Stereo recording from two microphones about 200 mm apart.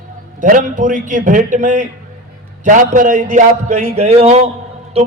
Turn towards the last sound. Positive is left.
turn(degrees=-30)  # may be behind; listen again after turning